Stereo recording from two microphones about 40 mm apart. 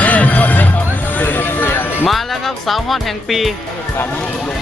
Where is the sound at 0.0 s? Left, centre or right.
Left.